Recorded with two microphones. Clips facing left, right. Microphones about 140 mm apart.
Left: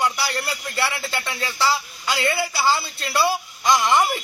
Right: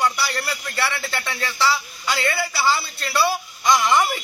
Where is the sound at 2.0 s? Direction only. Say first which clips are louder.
Left 1 dB; 15° left (ahead or behind).